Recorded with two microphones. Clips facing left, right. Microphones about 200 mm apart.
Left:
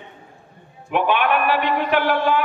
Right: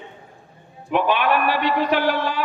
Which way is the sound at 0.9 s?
55° left (ahead or behind).